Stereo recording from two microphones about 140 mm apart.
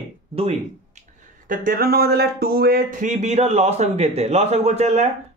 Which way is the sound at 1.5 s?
85° right.